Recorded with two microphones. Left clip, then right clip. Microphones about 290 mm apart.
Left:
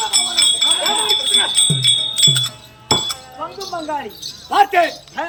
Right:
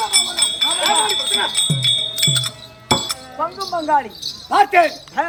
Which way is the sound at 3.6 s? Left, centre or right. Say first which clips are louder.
Right 6 dB; centre.